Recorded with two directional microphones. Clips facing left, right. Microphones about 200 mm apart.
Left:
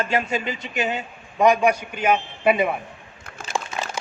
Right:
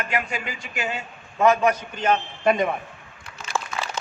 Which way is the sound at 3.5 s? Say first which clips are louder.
Left 1 dB; 15° left (ahead or behind).